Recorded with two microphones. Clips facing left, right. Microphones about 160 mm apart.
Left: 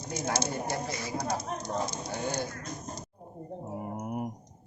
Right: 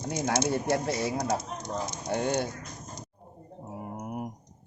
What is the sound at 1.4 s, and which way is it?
Speech, 20° right (ahead or behind).